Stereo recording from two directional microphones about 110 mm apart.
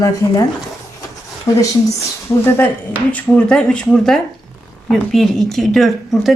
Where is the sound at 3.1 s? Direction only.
10° left (ahead or behind).